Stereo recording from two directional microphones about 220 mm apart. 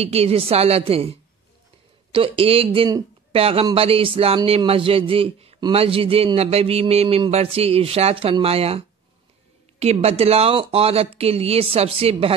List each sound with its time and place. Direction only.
0.0 s speech: 30° right (ahead or behind)
2.1 s speech: 25° right (ahead or behind)